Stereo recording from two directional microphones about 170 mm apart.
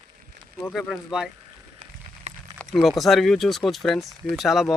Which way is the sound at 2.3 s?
40° right (ahead or behind).